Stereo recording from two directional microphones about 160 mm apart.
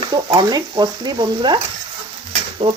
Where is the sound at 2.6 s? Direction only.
30° right (ahead or behind).